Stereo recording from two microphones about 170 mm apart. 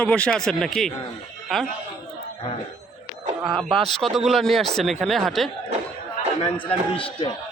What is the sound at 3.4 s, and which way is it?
A man's voice, centre (ahead or behind).